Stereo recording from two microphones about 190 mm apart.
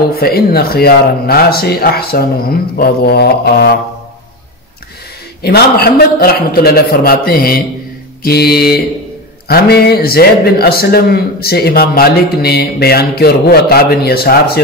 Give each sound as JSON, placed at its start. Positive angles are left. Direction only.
{"t": 0.1, "sound": "speech", "side_deg": 55}
{"t": 5.4, "sound": "a man's voice", "side_deg": 55}